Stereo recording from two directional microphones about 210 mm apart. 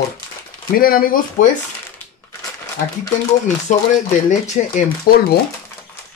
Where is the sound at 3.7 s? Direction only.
35° left (ahead or behind).